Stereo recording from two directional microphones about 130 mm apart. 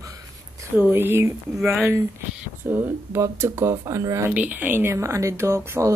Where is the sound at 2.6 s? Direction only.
15° right (ahead or behind).